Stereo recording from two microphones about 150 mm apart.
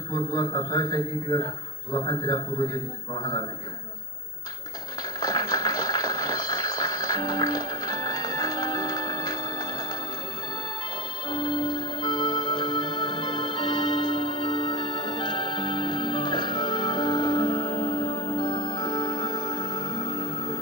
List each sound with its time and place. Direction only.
0.1 s a man's voice: 25° left (ahead or behind)
5.2 s a sound: 25° left (ahead or behind)
11.2 s music: 30° left (ahead or behind)